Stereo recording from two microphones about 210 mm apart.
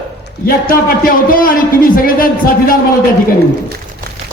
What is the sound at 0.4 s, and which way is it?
A man's voice, 40° left (ahead or behind).